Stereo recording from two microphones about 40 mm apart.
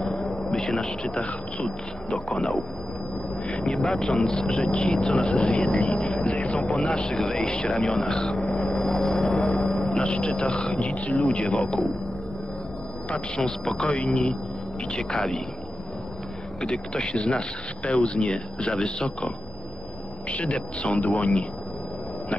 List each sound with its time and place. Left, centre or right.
0.0 s a sound: centre
2.0 s speech: left
6.8 s speech: centre
8.5 s a sound: left
8.8 s vehicle: centre
9.8 s speech: centre
10.8 s speech: left
11.4 s speech: centre
13.4 s speech: centre
16.6 s speech: left
20.2 s a man's voice: left